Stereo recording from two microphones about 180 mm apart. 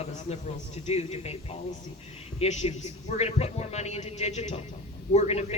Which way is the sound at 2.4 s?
35° left (ahead or behind).